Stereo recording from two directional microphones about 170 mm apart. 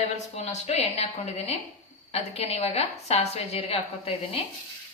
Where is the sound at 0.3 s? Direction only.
40° left (ahead or behind).